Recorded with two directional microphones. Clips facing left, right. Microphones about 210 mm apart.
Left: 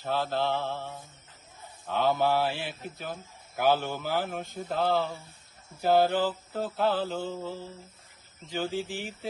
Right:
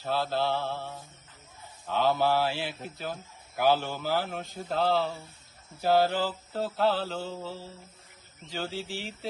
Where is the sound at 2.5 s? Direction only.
50° left (ahead or behind).